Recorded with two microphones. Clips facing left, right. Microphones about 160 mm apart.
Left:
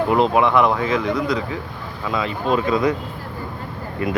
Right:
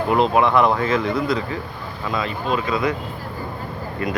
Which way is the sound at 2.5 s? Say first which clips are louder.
Left 4 dB; 45° left (ahead or behind).